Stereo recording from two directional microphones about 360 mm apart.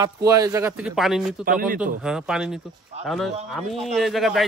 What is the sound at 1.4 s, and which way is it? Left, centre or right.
Speech, right.